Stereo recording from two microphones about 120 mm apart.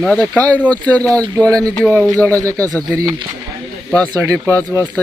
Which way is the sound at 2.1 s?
25° right (ahead or behind).